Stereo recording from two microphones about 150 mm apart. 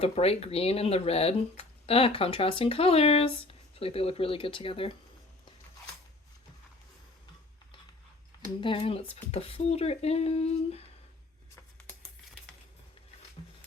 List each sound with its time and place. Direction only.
0.0 s speech: 45° left (ahead or behind)
8.6 s speech: 35° left (ahead or behind)